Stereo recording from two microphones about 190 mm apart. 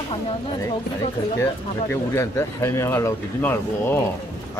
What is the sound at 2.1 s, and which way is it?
A man's voice, 15° left (ahead or behind).